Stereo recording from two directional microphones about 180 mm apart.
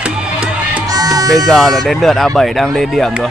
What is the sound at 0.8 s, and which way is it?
Music, 20° right (ahead or behind).